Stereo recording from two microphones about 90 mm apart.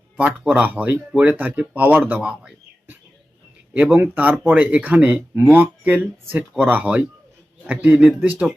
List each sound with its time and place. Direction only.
0.2 s speech: 15° right (ahead or behind)